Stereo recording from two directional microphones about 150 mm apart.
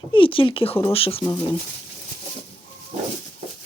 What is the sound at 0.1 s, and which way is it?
Speech, 35° left (ahead or behind).